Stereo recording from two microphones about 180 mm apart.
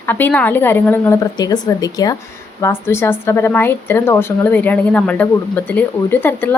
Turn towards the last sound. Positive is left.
turn(degrees=10)  # may be behind; listen again after turning